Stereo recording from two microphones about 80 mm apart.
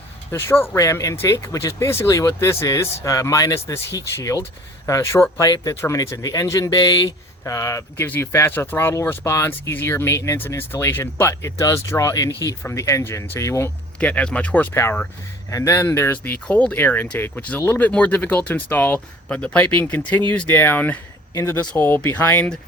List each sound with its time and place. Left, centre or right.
0.3 s speech: left
0.8 s speech: left
8.0 s speech: left
14.0 s speech: centre
14.7 s speech: left
16.1 s speech: left
21.3 s speech: left
21.7 s speech: left